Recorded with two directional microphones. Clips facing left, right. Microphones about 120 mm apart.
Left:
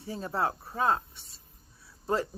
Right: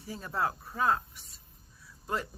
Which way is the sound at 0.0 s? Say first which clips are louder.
Left 2 dB; 30° left (ahead or behind).